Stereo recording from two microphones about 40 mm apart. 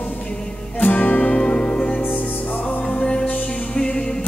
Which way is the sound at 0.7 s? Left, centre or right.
Left.